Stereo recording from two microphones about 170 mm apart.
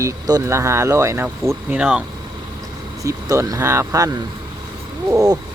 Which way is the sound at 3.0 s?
20° right (ahead or behind).